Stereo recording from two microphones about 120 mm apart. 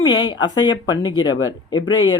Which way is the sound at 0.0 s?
40° left (ahead or behind).